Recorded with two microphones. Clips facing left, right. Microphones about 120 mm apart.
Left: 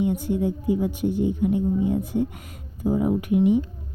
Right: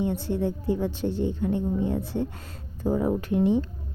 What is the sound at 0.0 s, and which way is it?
A woman's voice, 15° left (ahead or behind).